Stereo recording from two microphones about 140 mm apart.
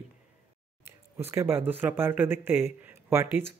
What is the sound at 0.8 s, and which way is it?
Speech, 15° right (ahead or behind).